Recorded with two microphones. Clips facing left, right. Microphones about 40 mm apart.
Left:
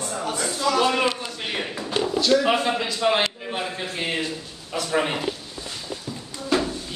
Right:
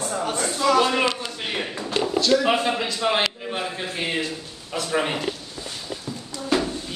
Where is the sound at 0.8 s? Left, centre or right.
Centre.